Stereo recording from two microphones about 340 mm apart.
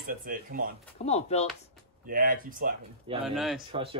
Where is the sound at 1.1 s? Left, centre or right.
Centre.